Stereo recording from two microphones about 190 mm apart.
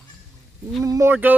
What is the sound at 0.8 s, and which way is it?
Speech, 15° right (ahead or behind).